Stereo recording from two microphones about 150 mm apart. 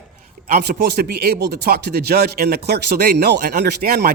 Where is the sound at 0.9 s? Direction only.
90° right.